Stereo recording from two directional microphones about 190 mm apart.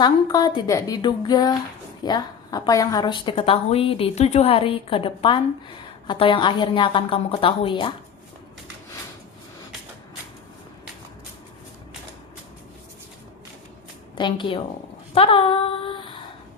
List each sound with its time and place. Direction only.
0.0 s a woman's voice: 20° left (ahead or behind)
14.2 s a woman's voice: 25° left (ahead or behind)
15.1 s female singing: 30° left (ahead or behind)